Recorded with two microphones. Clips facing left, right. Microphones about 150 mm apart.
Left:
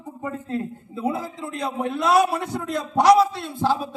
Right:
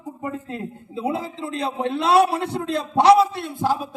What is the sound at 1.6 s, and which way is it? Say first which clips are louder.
A man's voice: right 1 dB; 30° right (ahead or behind).